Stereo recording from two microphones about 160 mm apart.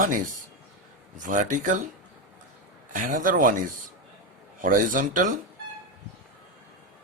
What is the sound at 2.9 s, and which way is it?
Speech, 55° right (ahead or behind).